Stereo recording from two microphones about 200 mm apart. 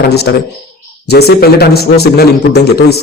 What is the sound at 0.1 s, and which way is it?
A man's voice, 55° left (ahead or behind).